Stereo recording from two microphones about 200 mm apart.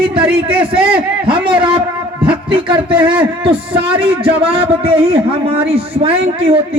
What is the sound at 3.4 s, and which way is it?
A man's voice, 25° right (ahead or behind).